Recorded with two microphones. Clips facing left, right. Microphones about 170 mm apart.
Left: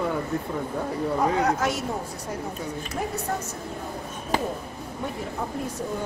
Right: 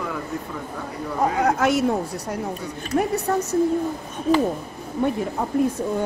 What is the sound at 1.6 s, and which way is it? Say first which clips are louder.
Speech: right 7 dB; 70° right (ahead or behind).